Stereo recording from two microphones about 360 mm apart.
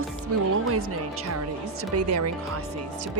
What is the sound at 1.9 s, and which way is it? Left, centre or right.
Speech, right.